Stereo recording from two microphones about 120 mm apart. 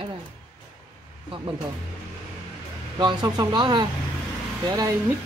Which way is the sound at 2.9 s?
40° right (ahead or behind).